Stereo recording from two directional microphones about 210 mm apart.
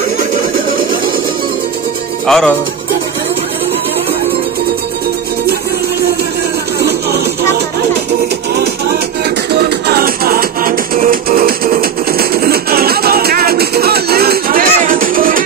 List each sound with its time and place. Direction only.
2.2 s speech: centre (ahead or behind)
6.8 s music: 50° right (ahead or behind)